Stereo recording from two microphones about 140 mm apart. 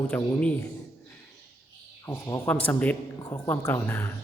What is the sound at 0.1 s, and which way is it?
Speech, 10° left (ahead or behind).